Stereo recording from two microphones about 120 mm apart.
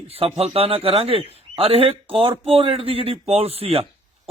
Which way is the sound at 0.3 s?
55° right (ahead or behind).